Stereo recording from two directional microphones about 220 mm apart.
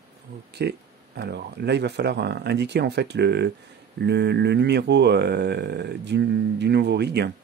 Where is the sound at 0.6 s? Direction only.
50° right (ahead or behind).